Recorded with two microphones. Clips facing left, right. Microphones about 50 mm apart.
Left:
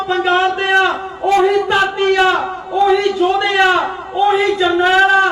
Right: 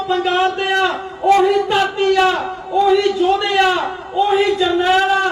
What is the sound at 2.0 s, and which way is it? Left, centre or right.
Speech, left.